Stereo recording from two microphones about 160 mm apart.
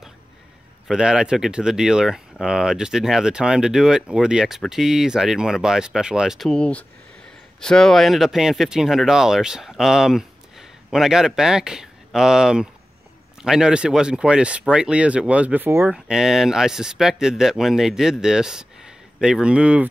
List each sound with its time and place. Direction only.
0.8 s speech: 5° right (ahead or behind)